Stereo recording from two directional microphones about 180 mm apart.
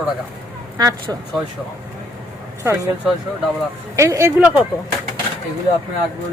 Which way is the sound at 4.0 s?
15° right (ahead or behind).